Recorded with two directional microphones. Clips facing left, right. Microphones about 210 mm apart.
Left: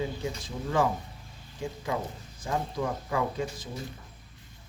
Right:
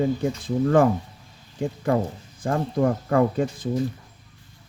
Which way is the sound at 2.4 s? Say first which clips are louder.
Right 8 dB; 55° right (ahead or behind).